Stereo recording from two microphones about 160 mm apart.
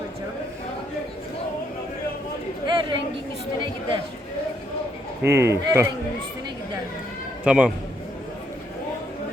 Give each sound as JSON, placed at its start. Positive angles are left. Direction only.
{"t": 2.6, "sound": "chatter", "side_deg": -30}
{"t": 3.6, "sound": "a woman's voice", "side_deg": -30}
{"t": 5.4, "sound": "speech", "side_deg": -15}
{"t": 7.4, "sound": "a man's voice", "side_deg": -5}